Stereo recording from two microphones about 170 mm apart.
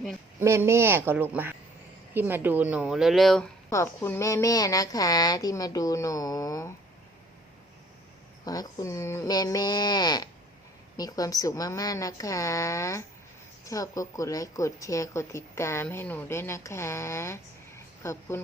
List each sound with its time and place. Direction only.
0.3 s speech: 15° right (ahead or behind); by 3.5 s centre (ahead or behind)
3.7 s speech: 15° left (ahead or behind)
8.4 s speech: 20° left (ahead or behind)